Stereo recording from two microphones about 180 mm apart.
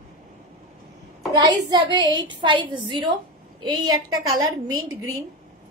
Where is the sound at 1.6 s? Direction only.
25° right (ahead or behind).